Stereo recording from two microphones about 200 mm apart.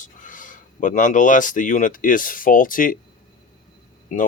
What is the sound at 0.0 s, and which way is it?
Speech, 40° left (ahead or behind).